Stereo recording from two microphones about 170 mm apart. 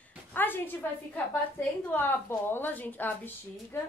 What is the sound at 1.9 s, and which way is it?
Speech, 10° left (ahead or behind).